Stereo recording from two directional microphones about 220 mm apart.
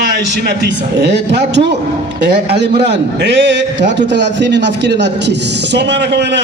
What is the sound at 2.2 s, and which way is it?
A man's voice, 50° right (ahead or behind).